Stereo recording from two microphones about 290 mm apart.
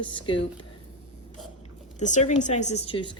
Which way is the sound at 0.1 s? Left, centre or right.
Centre.